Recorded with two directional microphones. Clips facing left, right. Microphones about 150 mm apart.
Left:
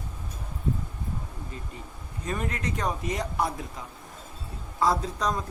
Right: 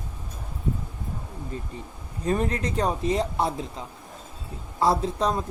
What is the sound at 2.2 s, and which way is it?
Speech, 35° right (ahead or behind).